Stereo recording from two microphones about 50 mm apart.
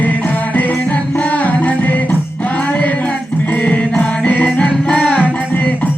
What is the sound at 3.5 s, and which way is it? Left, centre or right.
Music, left.